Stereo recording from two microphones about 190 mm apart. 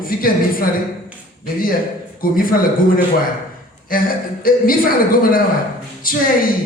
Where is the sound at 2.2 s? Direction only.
50° left (ahead or behind).